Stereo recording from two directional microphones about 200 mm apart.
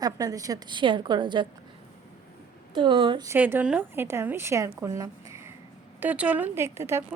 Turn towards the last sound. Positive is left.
turn(degrees=-15)  # may be behind; listen again after turning